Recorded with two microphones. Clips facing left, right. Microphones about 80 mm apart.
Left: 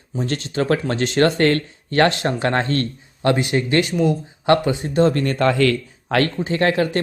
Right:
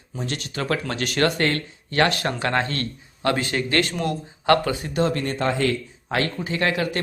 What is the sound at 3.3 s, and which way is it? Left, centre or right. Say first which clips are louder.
Speech: left 5 dB; centre.